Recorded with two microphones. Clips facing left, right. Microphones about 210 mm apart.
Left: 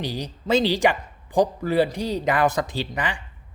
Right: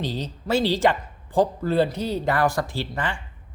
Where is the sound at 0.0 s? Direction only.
15° left (ahead or behind).